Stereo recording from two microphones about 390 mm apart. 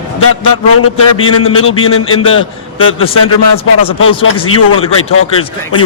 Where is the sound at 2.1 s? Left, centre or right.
Centre.